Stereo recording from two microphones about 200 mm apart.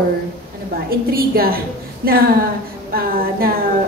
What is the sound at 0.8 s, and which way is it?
A woman's voice, 50° right (ahead or behind).